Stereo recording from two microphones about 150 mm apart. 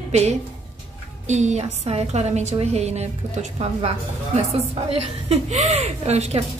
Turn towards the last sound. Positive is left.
turn(degrees=-45)  # may be behind; listen again after turning